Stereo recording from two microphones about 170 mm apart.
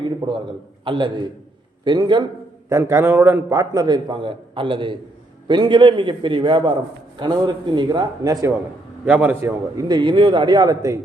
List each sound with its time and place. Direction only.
0.0 s a sound: 25° right (ahead or behind)
0.9 s a man's voice: 30° right (ahead or behind)
2.6 s a man's voice: 15° right (ahead or behind)
9.0 s a man's voice: 10° right (ahead or behind)
9.7 s a man's voice: 25° right (ahead or behind)